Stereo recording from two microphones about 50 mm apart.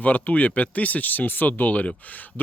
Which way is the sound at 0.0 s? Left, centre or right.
Left.